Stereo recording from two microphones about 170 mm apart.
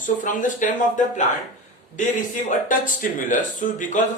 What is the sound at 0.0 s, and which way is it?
Speech, 50° left (ahead or behind).